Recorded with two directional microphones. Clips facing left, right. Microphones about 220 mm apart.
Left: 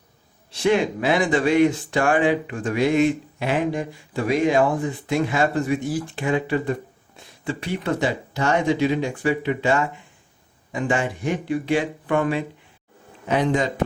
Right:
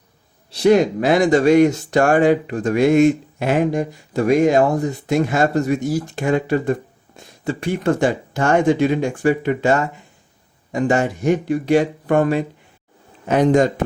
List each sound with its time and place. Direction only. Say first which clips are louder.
0.5 s speech: right 6 dB; 40° right (ahead or behind)